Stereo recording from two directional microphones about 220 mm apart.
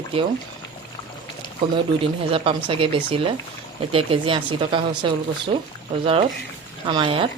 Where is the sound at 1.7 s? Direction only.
25° right (ahead or behind).